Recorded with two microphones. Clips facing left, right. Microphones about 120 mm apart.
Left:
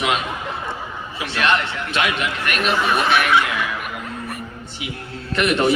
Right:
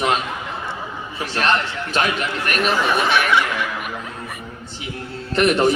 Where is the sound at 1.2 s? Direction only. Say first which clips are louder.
Even; 40° right (ahead or behind).